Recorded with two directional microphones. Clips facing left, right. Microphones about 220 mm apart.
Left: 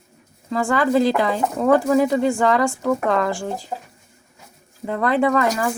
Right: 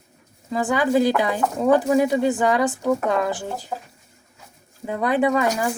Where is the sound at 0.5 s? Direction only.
15° right (ahead or behind).